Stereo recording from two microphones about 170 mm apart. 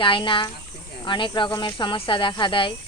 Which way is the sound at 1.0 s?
30° left (ahead or behind).